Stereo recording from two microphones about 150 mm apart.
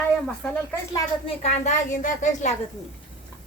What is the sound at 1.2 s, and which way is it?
Speech, 45° left (ahead or behind).